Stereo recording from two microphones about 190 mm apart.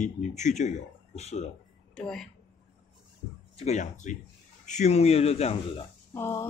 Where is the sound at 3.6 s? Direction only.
35° left (ahead or behind).